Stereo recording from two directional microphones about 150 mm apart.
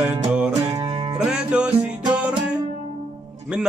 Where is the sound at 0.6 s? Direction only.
25° right (ahead or behind).